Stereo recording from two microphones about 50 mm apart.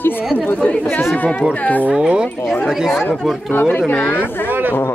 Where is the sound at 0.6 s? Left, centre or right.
Left.